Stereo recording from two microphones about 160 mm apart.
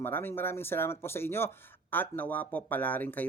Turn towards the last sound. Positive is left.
turn(degrees=10)  # may be behind; listen again after turning